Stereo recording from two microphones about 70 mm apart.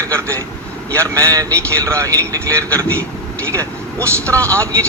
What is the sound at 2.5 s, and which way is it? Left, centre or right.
Speech, left.